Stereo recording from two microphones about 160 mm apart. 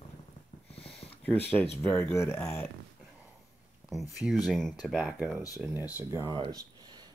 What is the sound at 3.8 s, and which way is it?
Speech, centre (ahead or behind).